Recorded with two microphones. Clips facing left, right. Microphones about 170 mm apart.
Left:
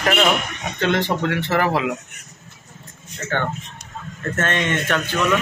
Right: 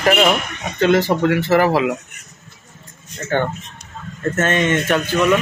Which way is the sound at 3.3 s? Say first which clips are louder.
Right 5 dB; 15° right (ahead or behind).